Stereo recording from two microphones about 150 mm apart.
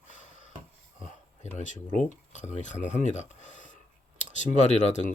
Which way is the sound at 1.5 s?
55° left (ahead or behind).